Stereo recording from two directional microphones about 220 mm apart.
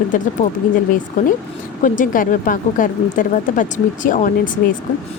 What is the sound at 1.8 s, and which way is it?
Speech, 35° left (ahead or behind).